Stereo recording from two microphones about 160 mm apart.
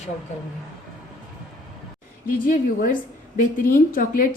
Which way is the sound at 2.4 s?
60° left (ahead or behind).